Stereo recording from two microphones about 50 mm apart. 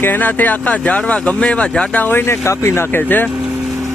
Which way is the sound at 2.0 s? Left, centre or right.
Left.